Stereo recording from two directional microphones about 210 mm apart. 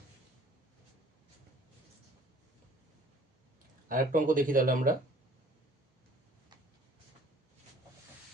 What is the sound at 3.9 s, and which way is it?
Speech, 40° right (ahead or behind).